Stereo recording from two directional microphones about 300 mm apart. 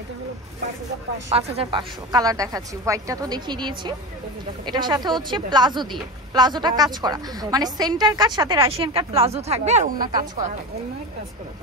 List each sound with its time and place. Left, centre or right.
1.3 s a woman's voice: centre